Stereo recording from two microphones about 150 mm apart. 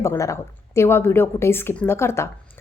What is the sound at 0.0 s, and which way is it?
A woman's voice, 20° left (ahead or behind).